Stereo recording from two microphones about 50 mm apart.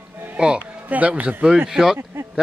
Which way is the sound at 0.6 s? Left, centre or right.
Right.